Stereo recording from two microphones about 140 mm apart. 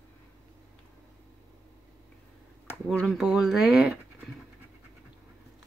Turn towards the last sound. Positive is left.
turn(degrees=-5)  # may be behind; listen again after turning